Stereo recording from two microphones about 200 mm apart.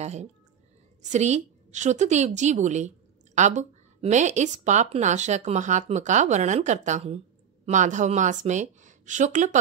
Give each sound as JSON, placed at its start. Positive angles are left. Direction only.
{"t": 0.0, "sound": "speech", "side_deg": -35}